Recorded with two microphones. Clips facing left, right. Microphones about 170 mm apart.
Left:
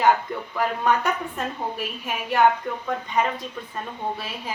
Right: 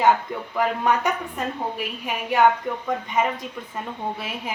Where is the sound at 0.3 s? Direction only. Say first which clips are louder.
Even; 15° right (ahead or behind).